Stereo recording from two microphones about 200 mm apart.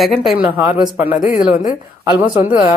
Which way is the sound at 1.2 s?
30° left (ahead or behind).